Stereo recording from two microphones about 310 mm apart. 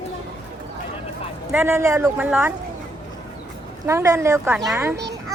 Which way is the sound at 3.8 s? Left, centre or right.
Centre.